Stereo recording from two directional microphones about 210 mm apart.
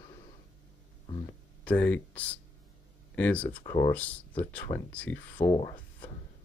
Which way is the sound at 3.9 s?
5° left (ahead or behind).